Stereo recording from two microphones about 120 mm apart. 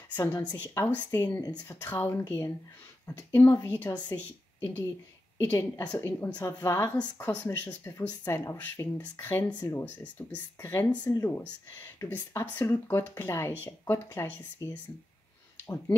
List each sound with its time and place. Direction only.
0.1 s a woman's voice: 15° left (ahead or behind)